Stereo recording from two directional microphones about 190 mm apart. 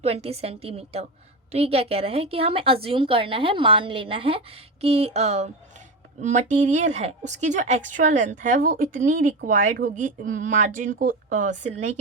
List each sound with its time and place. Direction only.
0.0 s a woman's voice: 30° right (ahead or behind)